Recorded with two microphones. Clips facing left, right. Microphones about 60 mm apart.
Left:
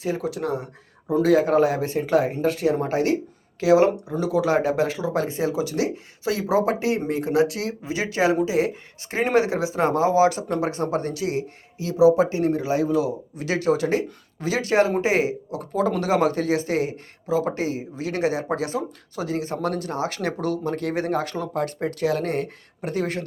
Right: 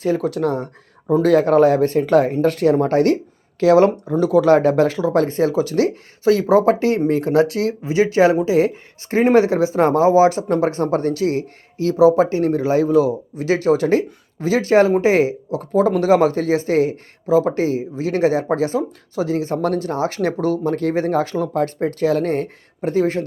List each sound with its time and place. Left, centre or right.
0.0 s speech: right
4.1 s speech: right
11.9 s speech: right